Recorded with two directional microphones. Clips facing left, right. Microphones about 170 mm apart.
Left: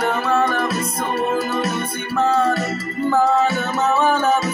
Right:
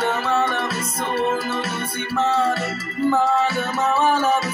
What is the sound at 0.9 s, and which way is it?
Music, 15° left (ahead or behind).